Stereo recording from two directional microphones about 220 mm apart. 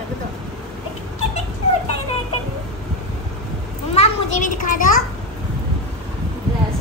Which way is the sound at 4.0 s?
35° left (ahead or behind).